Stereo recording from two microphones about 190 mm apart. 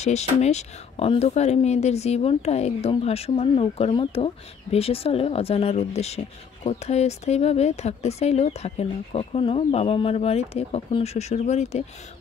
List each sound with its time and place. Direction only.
0.0 s speech: 35° left (ahead or behind)